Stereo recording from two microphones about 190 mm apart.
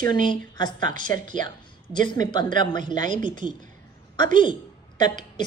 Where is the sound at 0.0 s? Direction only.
20° left (ahead or behind).